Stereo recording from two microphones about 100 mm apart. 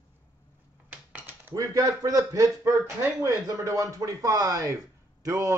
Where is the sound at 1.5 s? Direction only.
35° right (ahead or behind).